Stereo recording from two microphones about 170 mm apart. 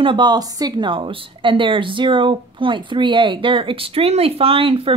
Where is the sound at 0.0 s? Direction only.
25° right (ahead or behind).